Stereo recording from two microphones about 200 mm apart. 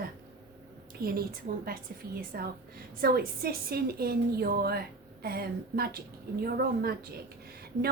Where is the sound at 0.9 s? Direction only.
50° right (ahead or behind).